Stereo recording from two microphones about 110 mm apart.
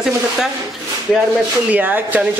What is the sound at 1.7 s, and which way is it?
Speech, 15° right (ahead or behind).